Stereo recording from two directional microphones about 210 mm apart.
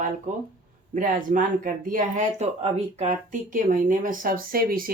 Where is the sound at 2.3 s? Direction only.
30° right (ahead or behind).